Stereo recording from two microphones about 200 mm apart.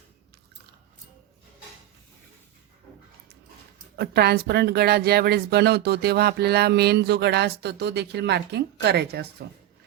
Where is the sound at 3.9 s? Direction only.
50° right (ahead or behind).